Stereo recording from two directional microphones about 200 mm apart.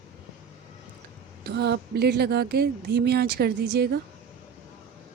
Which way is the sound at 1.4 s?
55° right (ahead or behind).